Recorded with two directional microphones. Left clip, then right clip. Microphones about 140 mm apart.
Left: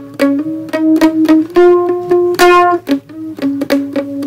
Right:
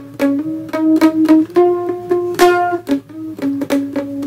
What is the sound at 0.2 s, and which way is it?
Music, 20° left (ahead or behind).